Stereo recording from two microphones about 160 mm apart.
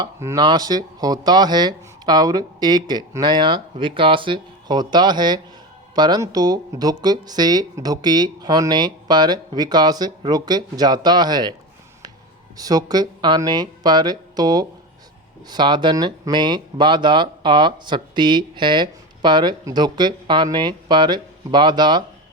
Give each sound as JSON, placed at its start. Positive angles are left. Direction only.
{"t": 0.0, "sound": "speech", "side_deg": -20}
{"t": 12.5, "sound": "speech", "side_deg": -25}